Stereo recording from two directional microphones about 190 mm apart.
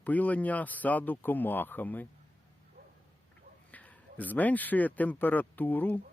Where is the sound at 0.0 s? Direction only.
10° left (ahead or behind).